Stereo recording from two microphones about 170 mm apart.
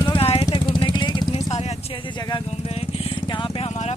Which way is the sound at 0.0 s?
30° left (ahead or behind).